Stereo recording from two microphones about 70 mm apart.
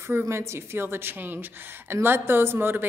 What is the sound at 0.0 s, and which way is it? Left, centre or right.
A woman's voice, right.